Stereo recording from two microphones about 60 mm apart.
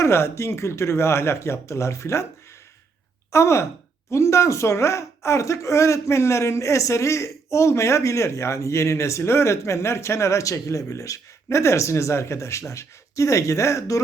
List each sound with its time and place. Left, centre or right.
0.0 s speech: left
3.3 s speech: left